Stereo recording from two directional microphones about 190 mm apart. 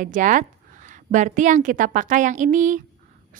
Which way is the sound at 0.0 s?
45° right (ahead or behind).